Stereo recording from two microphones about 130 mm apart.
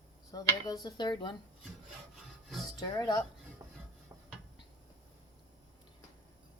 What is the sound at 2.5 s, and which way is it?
Music, centre (ahead or behind).